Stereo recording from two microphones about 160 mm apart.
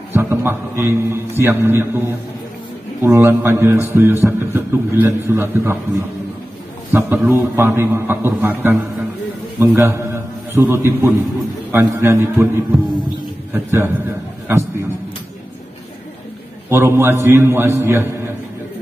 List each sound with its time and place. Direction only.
0.1 s a man's voice: 15° right (ahead or behind)
16.6 s a man's voice: 15° right (ahead or behind)